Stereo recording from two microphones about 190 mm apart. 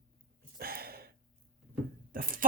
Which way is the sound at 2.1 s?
50° right (ahead or behind).